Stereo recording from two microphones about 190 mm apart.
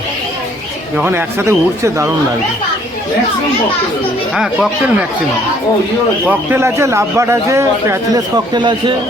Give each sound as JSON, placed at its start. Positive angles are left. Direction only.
{"t": 0.9, "sound": "a man's voice", "side_deg": -10}
{"t": 4.4, "sound": "speech", "side_deg": -5}
{"t": 6.2, "sound": "a man's voice", "side_deg": -10}